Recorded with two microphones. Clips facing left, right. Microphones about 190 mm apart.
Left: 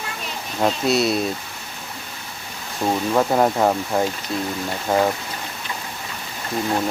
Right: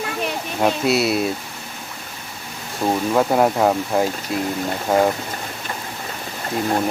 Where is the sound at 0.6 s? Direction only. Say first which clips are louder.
Right 1 dB; 5° right (ahead or behind).